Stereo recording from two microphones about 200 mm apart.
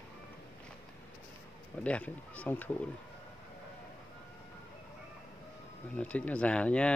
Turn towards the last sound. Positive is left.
turn(degrees=5)  # may be behind; listen again after turning